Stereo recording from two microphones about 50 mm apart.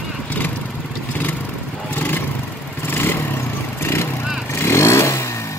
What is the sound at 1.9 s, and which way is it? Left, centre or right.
Vehicle, left.